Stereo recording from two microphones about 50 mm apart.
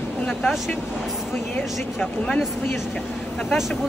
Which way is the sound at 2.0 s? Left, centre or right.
Left.